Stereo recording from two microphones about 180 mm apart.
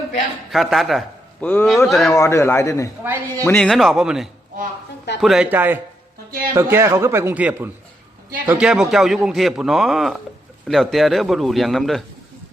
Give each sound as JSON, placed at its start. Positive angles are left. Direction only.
{"t": 0.5, "sound": "a man's voice", "side_deg": 0}
{"t": 2.1, "sound": "a man's voice", "side_deg": 15}
{"t": 3.0, "sound": "speech", "side_deg": -10}
{"t": 3.4, "sound": "a man's voice", "side_deg": 5}